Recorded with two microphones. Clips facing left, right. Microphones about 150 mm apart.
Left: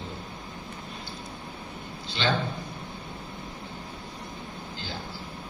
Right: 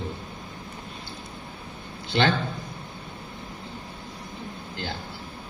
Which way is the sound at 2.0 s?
60° right (ahead or behind).